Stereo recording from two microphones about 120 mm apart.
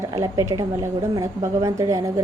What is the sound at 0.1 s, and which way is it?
A woman's voice, 30° right (ahead or behind).